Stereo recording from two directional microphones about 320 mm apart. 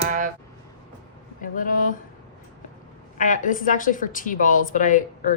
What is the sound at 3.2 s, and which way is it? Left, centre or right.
A woman's voice, left.